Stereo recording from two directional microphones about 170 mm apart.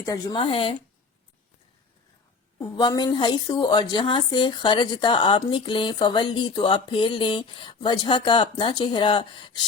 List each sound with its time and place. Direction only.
0.0 s a woman's voice: 20° left (ahead or behind)
2.6 s a woman's voice: 25° left (ahead or behind)